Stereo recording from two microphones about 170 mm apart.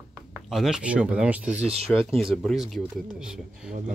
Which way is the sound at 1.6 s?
35° right (ahead or behind).